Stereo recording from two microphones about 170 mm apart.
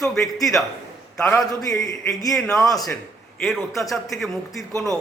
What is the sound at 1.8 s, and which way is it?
Speech, 20° left (ahead or behind).